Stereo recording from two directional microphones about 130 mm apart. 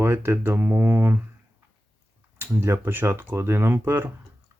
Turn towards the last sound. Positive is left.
turn(degrees=-20)  # may be behind; listen again after turning